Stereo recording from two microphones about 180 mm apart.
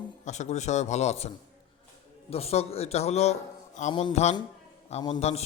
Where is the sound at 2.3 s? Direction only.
35° left (ahead or behind).